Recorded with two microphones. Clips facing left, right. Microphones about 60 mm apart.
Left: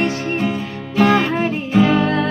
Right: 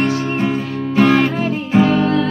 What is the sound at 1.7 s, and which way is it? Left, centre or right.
Music, right.